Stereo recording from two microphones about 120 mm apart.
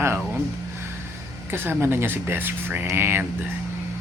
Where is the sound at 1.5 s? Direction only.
20° right (ahead or behind).